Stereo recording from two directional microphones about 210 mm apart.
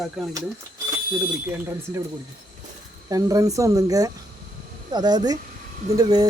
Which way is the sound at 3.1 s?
15° right (ahead or behind).